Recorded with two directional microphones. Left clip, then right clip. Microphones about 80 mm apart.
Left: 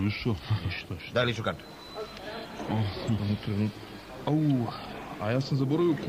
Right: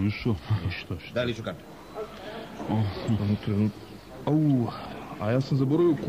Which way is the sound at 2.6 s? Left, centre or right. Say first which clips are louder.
Right 3 dB; right.